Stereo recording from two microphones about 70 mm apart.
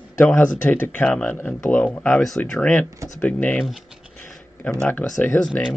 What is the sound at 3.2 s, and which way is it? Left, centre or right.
Speech, left.